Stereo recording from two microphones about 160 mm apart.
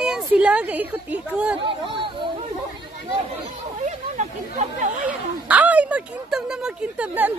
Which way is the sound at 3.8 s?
50° right (ahead or behind).